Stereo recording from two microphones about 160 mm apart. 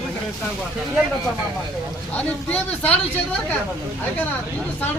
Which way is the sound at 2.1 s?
10° left (ahead or behind).